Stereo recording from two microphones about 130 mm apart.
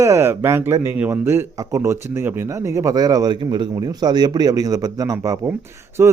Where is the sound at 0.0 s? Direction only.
20° right (ahead or behind).